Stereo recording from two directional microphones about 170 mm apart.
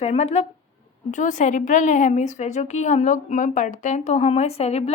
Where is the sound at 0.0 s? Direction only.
40° left (ahead or behind).